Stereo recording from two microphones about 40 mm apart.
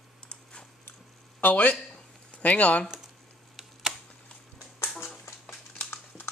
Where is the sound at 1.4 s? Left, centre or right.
Left.